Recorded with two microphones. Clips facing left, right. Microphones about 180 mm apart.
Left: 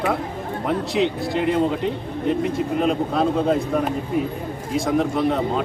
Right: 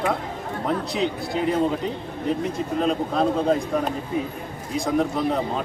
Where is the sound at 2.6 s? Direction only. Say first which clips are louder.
Left 2 dB; 5° left (ahead or behind).